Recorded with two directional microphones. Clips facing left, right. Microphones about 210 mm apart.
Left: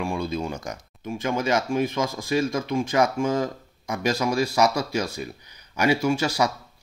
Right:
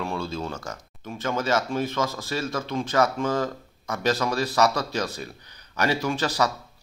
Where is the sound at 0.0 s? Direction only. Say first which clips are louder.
Left 3 dB; 15° left (ahead or behind).